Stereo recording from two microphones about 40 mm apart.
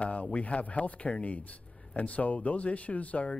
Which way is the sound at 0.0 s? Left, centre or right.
Left.